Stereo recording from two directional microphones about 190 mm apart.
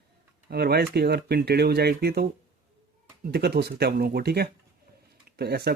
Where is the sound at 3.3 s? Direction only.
60° right (ahead or behind).